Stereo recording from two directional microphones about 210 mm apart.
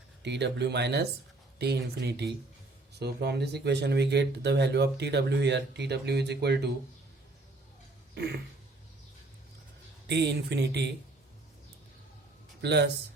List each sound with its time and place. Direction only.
0.2 s speech: 55° right (ahead or behind)
8.1 s a sound: 50° right (ahead or behind)
10.1 s speech: 55° right (ahead or behind)
12.6 s speech: 55° right (ahead or behind)